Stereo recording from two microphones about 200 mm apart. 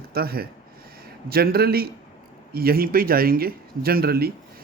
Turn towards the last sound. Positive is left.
turn(degrees=-50)  # may be behind; listen again after turning